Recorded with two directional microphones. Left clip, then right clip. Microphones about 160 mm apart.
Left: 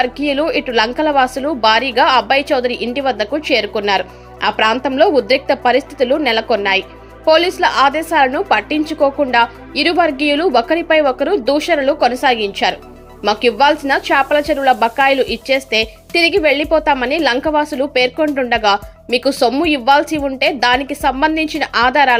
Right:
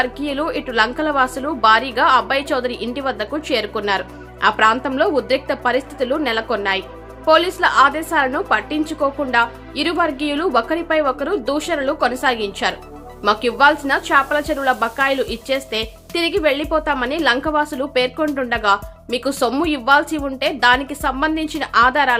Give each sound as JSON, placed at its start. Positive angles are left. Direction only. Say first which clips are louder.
{"t": 0.0, "sound": "speech", "louder": "left 5 dB", "side_deg": 20}